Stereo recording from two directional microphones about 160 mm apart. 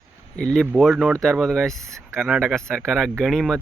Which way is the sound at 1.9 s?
20° right (ahead or behind).